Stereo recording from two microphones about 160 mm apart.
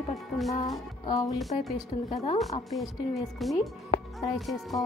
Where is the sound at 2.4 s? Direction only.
Centre (ahead or behind).